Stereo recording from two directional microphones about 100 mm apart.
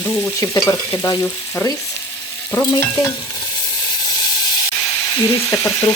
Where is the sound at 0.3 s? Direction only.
30° left (ahead or behind).